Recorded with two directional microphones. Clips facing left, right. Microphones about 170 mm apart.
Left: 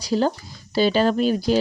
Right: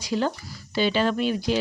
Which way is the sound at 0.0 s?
35° left (ahead or behind).